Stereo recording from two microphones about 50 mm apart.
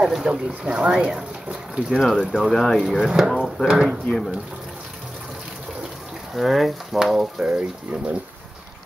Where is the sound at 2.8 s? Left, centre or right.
Centre.